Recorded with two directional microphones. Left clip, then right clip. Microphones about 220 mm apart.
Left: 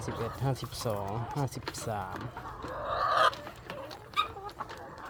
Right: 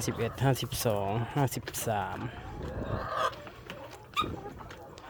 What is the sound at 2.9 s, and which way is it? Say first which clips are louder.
Chicken: left 6 dB; 5° right (ahead or behind).